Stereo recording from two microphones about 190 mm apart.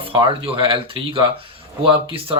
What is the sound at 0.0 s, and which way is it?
Speech, 30° right (ahead or behind).